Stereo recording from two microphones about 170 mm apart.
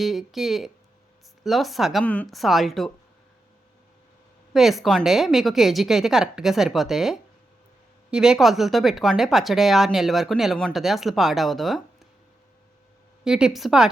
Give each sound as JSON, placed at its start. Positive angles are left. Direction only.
{"t": 0.0, "sound": "speech", "side_deg": 0}
{"t": 4.5, "sound": "speech", "side_deg": 0}
{"t": 13.2, "sound": "speech", "side_deg": -5}